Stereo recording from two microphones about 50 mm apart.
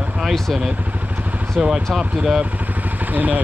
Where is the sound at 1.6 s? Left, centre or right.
Centre.